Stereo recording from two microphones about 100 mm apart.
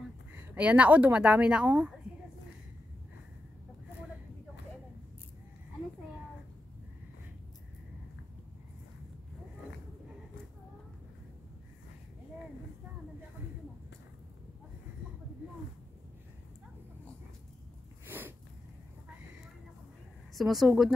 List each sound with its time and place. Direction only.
0.4 s speech: 15° right (ahead or behind)
18.0 s a sound: 20° right (ahead or behind)
20.3 s a woman's voice: centre (ahead or behind)